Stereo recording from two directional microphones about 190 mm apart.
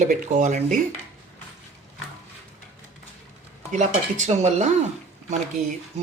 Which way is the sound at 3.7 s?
40° right (ahead or behind).